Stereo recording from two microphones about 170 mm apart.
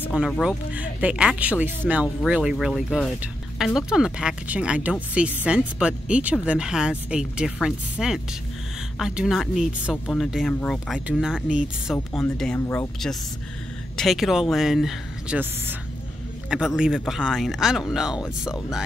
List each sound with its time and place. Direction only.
0.4 s speech: 5° right (ahead or behind)
12.5 s speech: 15° left (ahead or behind)
13.9 s speech: centre (ahead or behind)